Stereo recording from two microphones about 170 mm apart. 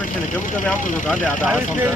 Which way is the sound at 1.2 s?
10° right (ahead or behind).